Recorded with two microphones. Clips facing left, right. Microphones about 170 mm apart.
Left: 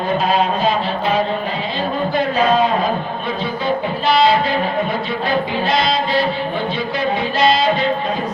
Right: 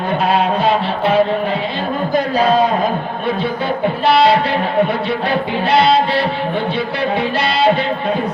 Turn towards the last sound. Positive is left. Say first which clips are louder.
# even
turn(degrees=-65)  # may be behind; listen again after turning